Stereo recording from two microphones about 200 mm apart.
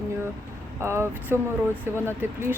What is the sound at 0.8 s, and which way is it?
A woman's voice, 10° right (ahead or behind).